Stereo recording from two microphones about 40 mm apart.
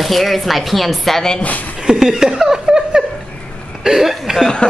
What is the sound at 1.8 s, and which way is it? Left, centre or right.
Chuckle, centre.